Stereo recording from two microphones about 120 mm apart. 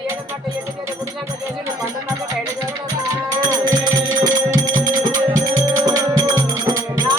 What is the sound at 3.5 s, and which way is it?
Music, 35° right (ahead or behind).